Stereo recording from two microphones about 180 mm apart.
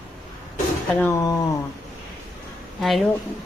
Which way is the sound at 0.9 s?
10° left (ahead or behind).